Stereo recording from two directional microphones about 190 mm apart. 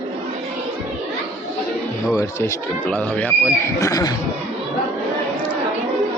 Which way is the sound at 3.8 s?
20° left (ahead or behind).